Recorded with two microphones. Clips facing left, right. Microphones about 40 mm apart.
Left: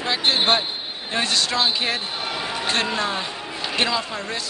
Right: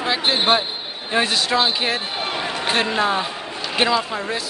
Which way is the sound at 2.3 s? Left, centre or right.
Right.